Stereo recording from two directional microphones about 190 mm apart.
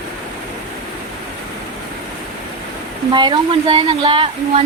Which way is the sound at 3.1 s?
25° right (ahead or behind).